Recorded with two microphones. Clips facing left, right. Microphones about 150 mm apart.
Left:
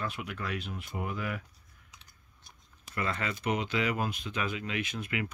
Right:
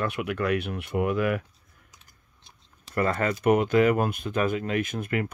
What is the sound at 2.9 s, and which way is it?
Speech, 45° right (ahead or behind).